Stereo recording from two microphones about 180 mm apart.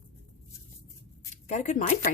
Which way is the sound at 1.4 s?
40° left (ahead or behind).